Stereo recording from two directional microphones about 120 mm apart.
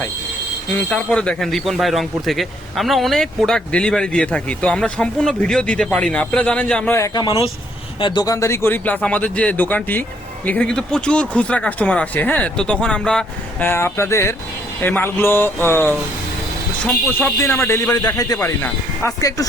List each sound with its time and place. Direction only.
0.7 s speech: 10° left (ahead or behind)
7.1 s speech: 30° left (ahead or behind)
7.9 s speech: 45° left (ahead or behind)
8.2 s speech: 25° left (ahead or behind); by 13.2 s 5° left (ahead or behind)
13.6 s speech: 20° left (ahead or behind)